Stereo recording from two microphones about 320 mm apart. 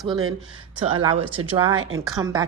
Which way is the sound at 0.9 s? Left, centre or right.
Centre.